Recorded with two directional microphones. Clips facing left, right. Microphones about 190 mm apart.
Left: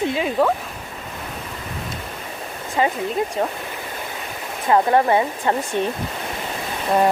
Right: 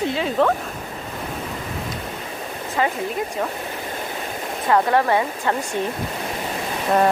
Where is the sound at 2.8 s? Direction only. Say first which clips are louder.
Left 2 dB; 20° left (ahead or behind).